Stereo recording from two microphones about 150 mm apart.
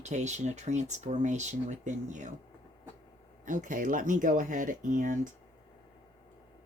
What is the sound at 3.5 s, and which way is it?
Speech, 60° right (ahead or behind).